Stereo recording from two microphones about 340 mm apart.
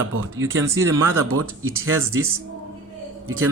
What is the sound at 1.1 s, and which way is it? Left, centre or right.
Speech, right.